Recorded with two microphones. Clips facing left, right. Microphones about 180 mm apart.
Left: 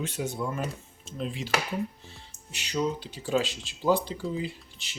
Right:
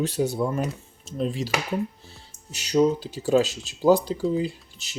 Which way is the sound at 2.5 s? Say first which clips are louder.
Right 9 dB; 40° right (ahead or behind).